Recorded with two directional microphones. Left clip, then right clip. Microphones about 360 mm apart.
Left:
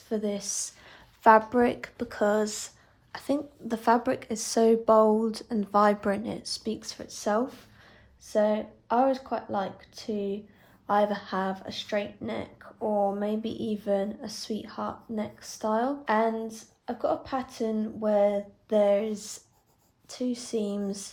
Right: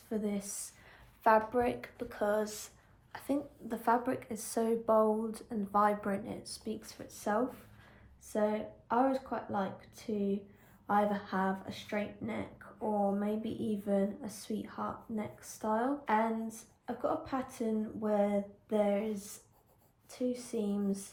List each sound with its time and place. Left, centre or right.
0.1 s speech: left